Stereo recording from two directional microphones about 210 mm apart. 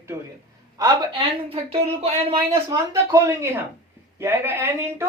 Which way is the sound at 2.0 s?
25° right (ahead or behind).